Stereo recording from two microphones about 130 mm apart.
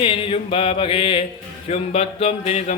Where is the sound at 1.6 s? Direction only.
55° left (ahead or behind).